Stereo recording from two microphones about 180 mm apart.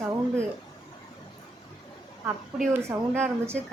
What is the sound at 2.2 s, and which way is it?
A woman's voice, 10° right (ahead or behind).